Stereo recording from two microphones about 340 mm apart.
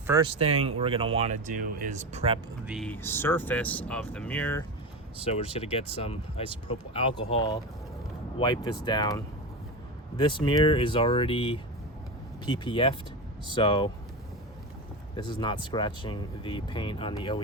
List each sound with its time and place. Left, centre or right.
0.1 s speech: centre
2.6 s speech: centre
5.3 s speech: centre
15.1 s speech: centre